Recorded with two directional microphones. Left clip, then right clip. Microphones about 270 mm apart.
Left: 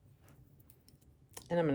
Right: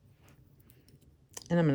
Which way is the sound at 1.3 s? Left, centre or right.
Right.